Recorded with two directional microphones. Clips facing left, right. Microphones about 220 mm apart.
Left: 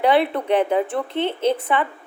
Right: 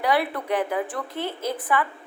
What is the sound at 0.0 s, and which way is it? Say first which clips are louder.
Speech: left 6 dB; 25° left (ahead or behind).